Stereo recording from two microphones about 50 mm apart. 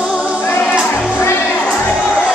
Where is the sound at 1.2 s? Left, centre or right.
Left.